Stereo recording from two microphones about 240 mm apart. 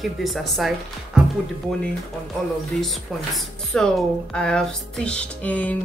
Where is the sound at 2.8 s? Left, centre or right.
Centre.